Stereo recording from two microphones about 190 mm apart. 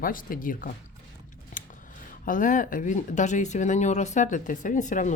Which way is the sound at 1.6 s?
45° left (ahead or behind).